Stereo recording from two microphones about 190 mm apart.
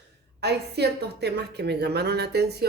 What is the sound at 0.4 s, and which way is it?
A woman's voice, 60° right (ahead or behind).